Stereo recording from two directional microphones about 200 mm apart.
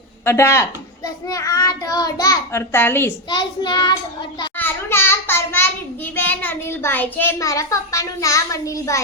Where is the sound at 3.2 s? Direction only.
25° left (ahead or behind).